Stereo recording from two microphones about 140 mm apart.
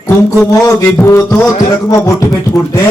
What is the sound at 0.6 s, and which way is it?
Music, 20° left (ahead or behind).